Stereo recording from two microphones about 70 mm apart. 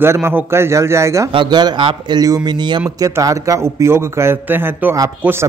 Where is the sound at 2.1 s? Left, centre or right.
Right.